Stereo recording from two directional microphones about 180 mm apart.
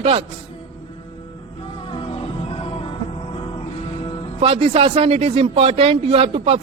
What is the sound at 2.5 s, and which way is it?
Music, 30° left (ahead or behind).